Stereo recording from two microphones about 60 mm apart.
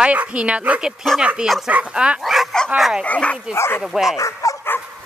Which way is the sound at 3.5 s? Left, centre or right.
Left.